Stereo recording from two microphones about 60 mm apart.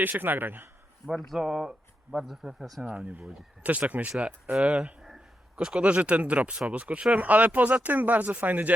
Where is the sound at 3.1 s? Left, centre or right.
Right.